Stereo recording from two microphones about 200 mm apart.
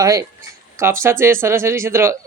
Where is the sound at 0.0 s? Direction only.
20° right (ahead or behind).